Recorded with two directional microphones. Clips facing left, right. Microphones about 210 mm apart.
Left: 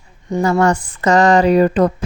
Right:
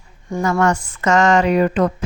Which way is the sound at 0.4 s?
35° left (ahead or behind).